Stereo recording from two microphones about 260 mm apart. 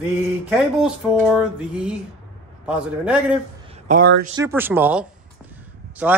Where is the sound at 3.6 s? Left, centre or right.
Right.